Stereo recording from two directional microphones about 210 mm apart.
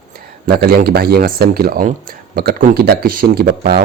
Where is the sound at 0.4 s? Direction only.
45° right (ahead or behind).